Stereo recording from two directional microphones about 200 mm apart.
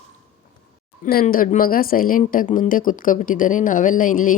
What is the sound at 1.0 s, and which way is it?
Speech, 45° left (ahead or behind).